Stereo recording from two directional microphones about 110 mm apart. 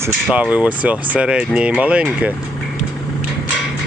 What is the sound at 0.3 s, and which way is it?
Speech, 15° right (ahead or behind).